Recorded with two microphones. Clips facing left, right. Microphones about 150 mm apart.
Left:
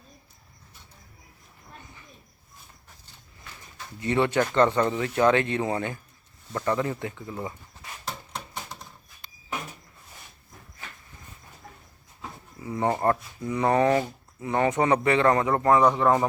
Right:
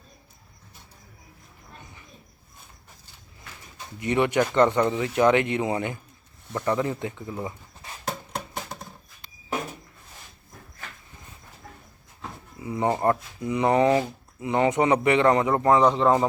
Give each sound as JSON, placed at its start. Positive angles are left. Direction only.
{"t": 3.8, "sound": "speech", "side_deg": -15}
{"t": 12.5, "sound": "a man's voice", "side_deg": -15}